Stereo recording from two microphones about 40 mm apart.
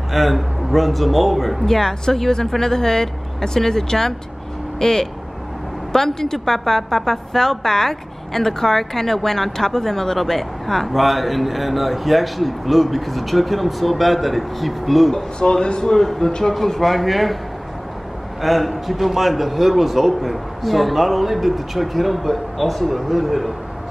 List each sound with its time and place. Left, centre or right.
0.1 s a woman's voice: centre
1.7 s a woman's voice: centre
15.3 s a woman's voice: left; by 17.4 s centre
18.4 s a woman's voice: centre